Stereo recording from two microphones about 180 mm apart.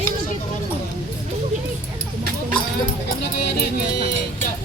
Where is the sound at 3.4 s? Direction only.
65° left (ahead or behind).